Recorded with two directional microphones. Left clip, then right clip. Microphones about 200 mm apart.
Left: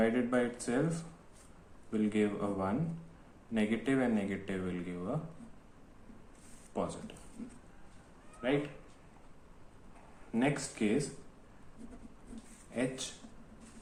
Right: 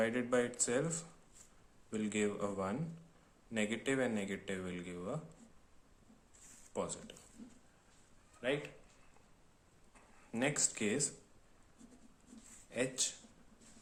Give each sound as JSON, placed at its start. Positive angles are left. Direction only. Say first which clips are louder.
{"t": 0.0, "sound": "speech", "louder": "left 3 dB", "side_deg": -45}
{"t": 6.7, "sound": "speech", "louder": "left 4 dB", "side_deg": -30}
{"t": 8.4, "sound": "speech", "louder": "left 4 dB", "side_deg": -40}
{"t": 10.3, "sound": "speech", "louder": "left 3 dB", "side_deg": -45}